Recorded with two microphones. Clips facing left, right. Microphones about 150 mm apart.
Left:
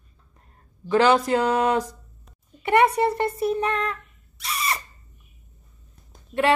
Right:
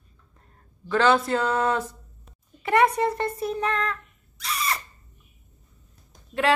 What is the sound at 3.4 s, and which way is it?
Speech, 5° left (ahead or behind).